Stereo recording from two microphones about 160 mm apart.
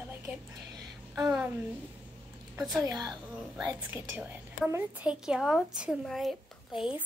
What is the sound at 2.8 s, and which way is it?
Speech, 25° right (ahead or behind).